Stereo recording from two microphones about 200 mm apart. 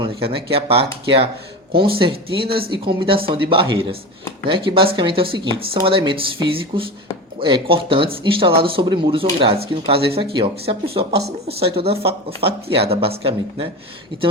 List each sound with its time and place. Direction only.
0.0 s speech: 25° right (ahead or behind)